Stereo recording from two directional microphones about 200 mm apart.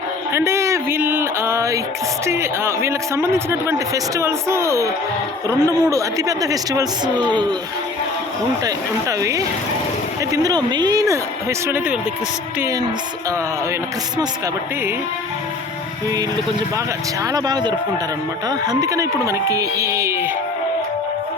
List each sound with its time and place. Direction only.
0.3 s speech: 15° right (ahead or behind)
8.6 s speech: 15° right (ahead or behind)
17.3 s speech: 20° right (ahead or behind)